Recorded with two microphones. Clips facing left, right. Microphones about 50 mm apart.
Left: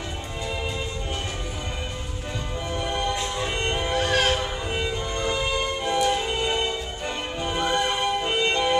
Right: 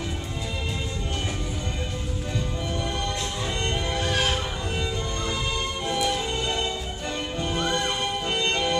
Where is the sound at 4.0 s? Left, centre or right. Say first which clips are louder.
Left 4 dB; left.